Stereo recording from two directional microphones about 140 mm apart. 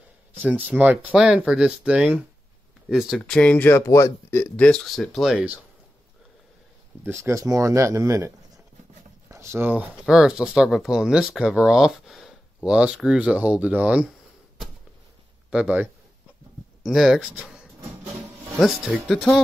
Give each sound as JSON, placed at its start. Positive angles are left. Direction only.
{"t": 0.4, "sound": "speech", "side_deg": -10}
{"t": 3.3, "sound": "speech", "side_deg": 10}
{"t": 7.0, "sound": "speech", "side_deg": -20}
{"t": 9.3, "sound": "speech", "side_deg": -20}
{"t": 15.5, "sound": "speech", "side_deg": -10}